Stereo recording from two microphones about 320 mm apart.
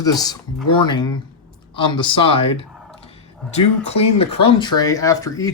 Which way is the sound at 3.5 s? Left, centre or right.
Centre.